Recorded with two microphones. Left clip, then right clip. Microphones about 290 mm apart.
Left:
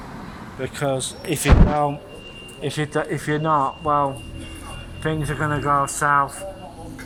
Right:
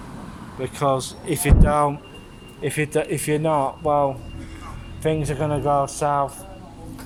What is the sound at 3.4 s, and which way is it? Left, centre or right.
Speech, right.